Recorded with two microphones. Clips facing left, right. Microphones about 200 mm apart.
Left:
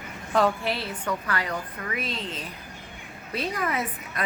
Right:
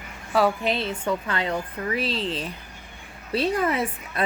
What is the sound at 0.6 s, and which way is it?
Speech, 20° right (ahead or behind).